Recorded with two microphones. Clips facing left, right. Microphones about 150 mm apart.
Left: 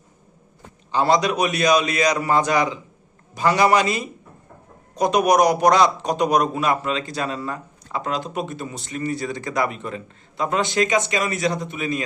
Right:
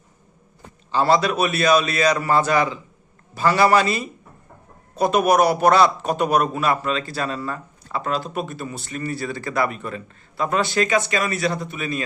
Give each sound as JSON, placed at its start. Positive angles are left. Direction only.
{"t": 0.9, "sound": "a man's voice", "side_deg": 15}